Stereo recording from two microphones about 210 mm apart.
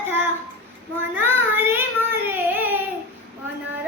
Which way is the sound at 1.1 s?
10° right (ahead or behind).